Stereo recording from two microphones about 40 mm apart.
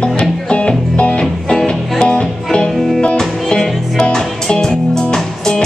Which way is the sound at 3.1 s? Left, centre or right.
Centre.